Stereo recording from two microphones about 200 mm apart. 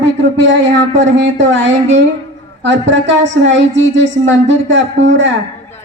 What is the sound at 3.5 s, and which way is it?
Speech, 65° right (ahead or behind).